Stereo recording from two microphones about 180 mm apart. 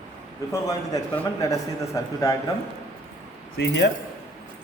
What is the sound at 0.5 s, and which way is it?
A man's voice, 15° left (ahead or behind).